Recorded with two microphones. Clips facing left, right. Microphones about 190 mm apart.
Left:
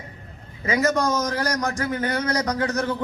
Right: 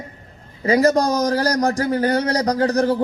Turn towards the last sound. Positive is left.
turn(degrees=-35)  # may be behind; listen again after turning